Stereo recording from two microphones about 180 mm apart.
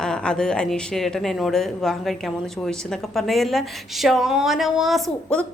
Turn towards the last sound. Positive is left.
turn(degrees=5)  # may be behind; listen again after turning